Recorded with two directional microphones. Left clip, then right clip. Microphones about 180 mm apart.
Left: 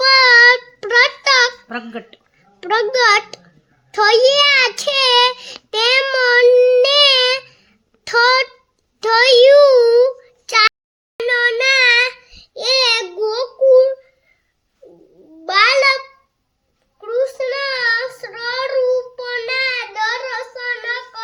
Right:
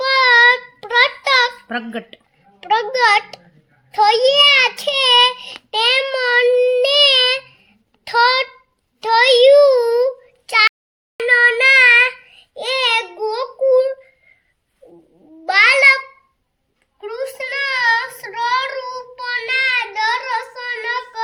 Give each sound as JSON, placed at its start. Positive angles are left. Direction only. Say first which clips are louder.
{"t": 0.0, "sound": "child singing", "louder": "left 2 dB", "side_deg": 45}
{"t": 1.6, "sound": "speech", "louder": "right 3 dB", "side_deg": -30}
{"t": 2.6, "sound": "a child's voice", "louder": "left 1 dB", "side_deg": 40}
{"t": 5.9, "sound": "child singing", "louder": "left 4 dB", "side_deg": 45}
{"t": 8.0, "sound": "a sound", "louder": "left 1 dB", "side_deg": 45}
{"t": 9.0, "sound": "child singing", "louder": "left 1 dB", "side_deg": 45}
{"t": 10.5, "sound": "a sound", "louder": "left 1 dB", "side_deg": 40}
{"t": 11.2, "sound": "child singing", "louder": "right 3 dB", "side_deg": 15}
{"t": 15.4, "sound": "a sound", "louder": "right 1 dB", "side_deg": 15}
{"t": 17.0, "sound": "child singing", "louder": "left 6 dB", "side_deg": 15}